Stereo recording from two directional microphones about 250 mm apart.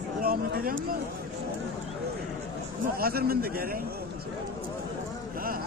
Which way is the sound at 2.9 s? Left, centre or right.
Right.